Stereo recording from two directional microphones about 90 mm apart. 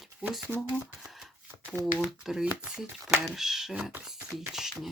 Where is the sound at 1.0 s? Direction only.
Centre (ahead or behind).